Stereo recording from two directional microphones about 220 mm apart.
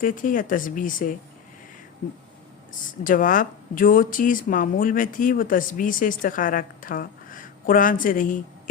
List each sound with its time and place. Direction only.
0.0 s speech: 40° left (ahead or behind)
3.0 s speech: 40° left (ahead or behind)